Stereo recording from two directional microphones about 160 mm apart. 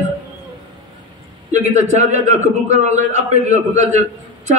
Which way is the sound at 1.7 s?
45° right (ahead or behind).